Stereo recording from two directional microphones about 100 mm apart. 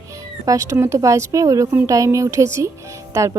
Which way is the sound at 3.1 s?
30° right (ahead or behind).